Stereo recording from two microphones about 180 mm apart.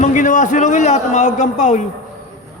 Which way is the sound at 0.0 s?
45° left (ahead or behind).